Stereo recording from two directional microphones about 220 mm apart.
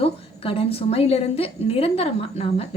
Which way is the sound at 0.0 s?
25° left (ahead or behind).